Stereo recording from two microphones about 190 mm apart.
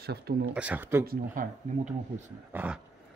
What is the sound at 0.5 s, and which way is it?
Speech, 5° right (ahead or behind).